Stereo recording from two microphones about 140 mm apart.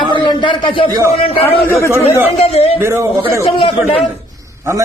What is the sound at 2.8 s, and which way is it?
Speech, 20° right (ahead or behind).